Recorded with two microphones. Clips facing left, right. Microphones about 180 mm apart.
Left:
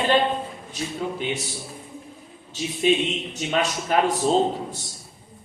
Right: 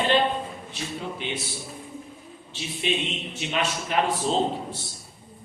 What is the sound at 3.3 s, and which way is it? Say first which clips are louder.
Speech: left 2 dB; 40° left (ahead or behind).